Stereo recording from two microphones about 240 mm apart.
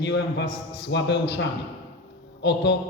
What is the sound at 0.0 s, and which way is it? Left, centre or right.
A man's voice, left.